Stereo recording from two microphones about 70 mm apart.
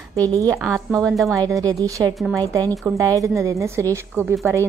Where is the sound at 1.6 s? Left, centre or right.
Right.